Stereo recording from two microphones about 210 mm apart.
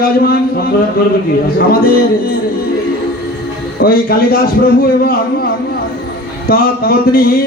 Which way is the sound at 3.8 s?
45° left (ahead or behind).